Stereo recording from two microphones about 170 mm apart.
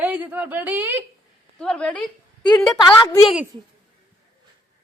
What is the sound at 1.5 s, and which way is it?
Speech, 5° left (ahead or behind).